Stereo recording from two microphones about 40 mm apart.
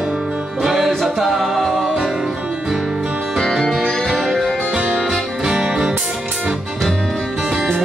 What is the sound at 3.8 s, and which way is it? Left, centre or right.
Music, centre.